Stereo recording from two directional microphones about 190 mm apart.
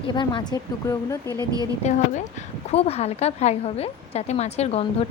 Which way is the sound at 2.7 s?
30° left (ahead or behind).